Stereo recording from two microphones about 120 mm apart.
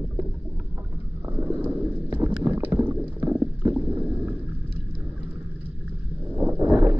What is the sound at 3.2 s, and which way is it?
Stomach rumble, 15° right (ahead or behind).